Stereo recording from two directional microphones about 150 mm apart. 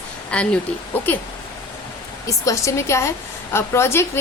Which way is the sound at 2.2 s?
20° left (ahead or behind).